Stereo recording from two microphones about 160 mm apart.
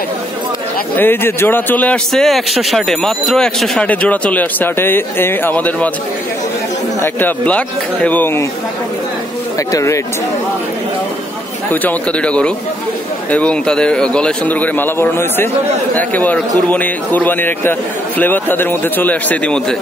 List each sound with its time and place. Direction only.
0.9 s a man's voice: 15° left (ahead or behind)
7.0 s a man's voice: 10° left (ahead or behind)
9.7 s speech: 20° left (ahead or behind)
11.7 s a man's voice: 10° left (ahead or behind)